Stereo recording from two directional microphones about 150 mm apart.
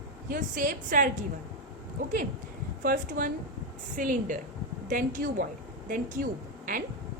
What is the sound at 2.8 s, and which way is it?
A woman's voice, 75° right (ahead or behind).